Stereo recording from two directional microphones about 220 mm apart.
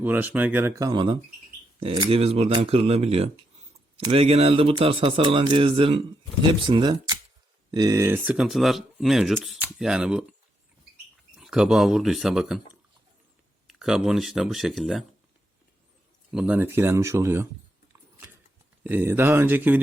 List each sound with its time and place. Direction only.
0.0 s a man's voice: 10° right (ahead or behind)
11.3 s speech: 5° right (ahead or behind)
13.7 s speech: centre (ahead or behind)
16.3 s speech: 5° right (ahead or behind)
18.8 s speech: 10° right (ahead or behind)